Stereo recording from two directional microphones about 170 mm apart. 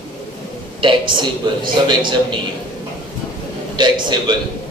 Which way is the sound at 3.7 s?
25° right (ahead or behind).